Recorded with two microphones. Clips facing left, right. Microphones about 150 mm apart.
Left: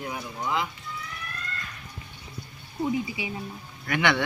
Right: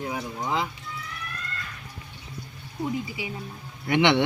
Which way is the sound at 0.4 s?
35° right (ahead or behind).